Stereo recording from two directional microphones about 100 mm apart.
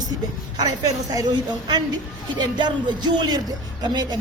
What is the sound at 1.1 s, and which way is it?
A woman's voice, 45° right (ahead or behind).